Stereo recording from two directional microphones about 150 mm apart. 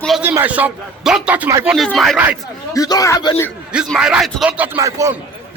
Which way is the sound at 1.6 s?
5° right (ahead or behind).